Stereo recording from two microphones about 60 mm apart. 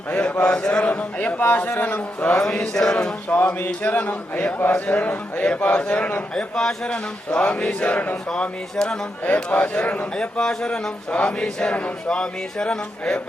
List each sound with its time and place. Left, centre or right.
0.1 s a man's voice: left
2.4 s speech: centre
3.3 s a man's voice: left
3.8 s a man's voice: left
8.3 s speech: centre
9.2 s a man's voice: left
10.2 s speech: centre